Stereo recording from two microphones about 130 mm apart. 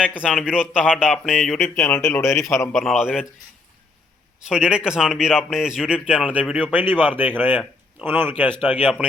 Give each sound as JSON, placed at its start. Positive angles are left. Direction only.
{"t": 0.0, "sound": "speech", "side_deg": -5}
{"t": 1.9, "sound": "speech", "side_deg": 20}
{"t": 2.3, "sound": "speech", "side_deg": 0}
{"t": 4.4, "sound": "speech", "side_deg": -5}